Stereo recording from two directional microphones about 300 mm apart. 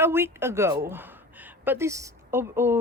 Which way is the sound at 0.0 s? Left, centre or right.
Centre.